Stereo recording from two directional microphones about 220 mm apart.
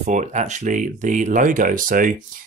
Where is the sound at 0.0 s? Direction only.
35° right (ahead or behind).